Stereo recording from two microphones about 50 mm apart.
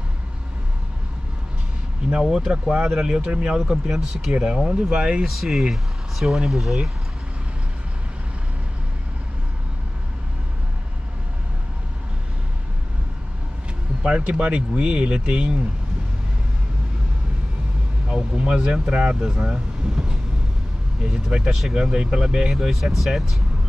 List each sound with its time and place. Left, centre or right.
2.2 s speech: centre
3.5 s speech: centre
4.3 s speech: centre
5.2 s speech: centre
14.0 s speech: centre
18.0 s speech: right; by 23.3 s centre